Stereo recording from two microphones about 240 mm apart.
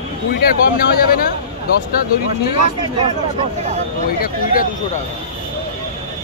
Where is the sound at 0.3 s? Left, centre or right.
Left.